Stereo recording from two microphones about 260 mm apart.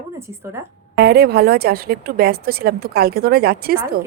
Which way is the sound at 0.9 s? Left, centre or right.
Right.